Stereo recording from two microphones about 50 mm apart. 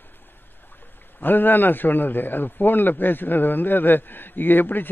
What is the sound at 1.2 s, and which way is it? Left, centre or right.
A man's voice, left.